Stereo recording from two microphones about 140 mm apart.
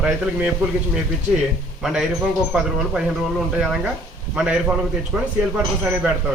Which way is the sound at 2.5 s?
5° right (ahead or behind).